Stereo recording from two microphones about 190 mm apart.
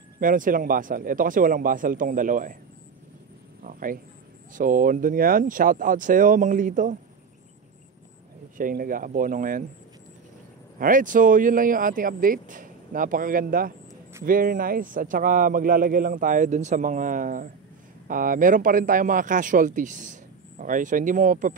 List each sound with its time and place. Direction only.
0.2 s speech: 45° right (ahead or behind)
3.6 s a sound: 45° right (ahead or behind)
4.6 s speech: 45° right (ahead or behind)
8.5 s speech: 45° right (ahead or behind)
10.8 s speech: 45° right (ahead or behind)